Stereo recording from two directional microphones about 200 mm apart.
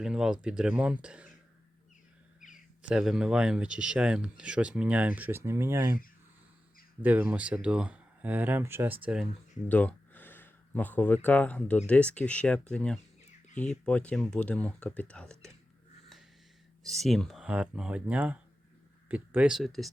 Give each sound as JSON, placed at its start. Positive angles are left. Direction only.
{"t": 0.0, "sound": "speech", "side_deg": -5}
{"t": 2.8, "sound": "speech", "side_deg": 0}
{"t": 7.0, "sound": "speech", "side_deg": -5}
{"t": 9.6, "sound": "speech", "side_deg": 10}
{"t": 16.8, "sound": "speech", "side_deg": 0}